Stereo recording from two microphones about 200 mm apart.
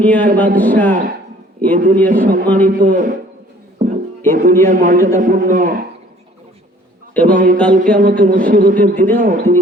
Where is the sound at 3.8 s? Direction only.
45° right (ahead or behind).